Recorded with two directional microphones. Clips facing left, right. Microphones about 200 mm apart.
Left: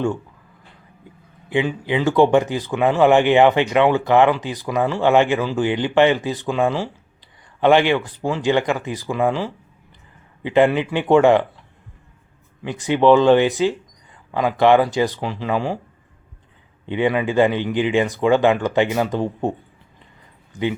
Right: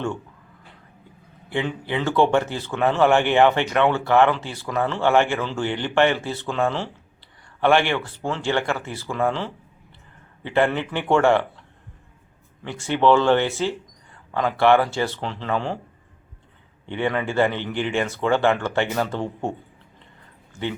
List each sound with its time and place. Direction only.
1.5 s speech: 15° left (ahead or behind)
12.6 s speech: 15° left (ahead or behind)
16.8 s speech: 15° left (ahead or behind)